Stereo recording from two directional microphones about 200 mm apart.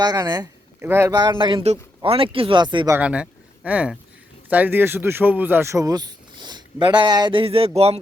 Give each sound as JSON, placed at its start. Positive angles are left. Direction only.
{"t": 0.0, "sound": "a man's voice", "side_deg": -20}
{"t": 3.0, "sound": "speech", "side_deg": -5}